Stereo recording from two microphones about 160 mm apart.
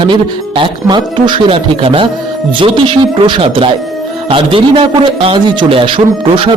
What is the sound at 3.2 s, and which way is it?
A man's voice, 35° right (ahead or behind).